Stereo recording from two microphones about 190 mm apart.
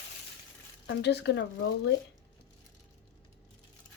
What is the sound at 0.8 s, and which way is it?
Speech, 60° left (ahead or behind).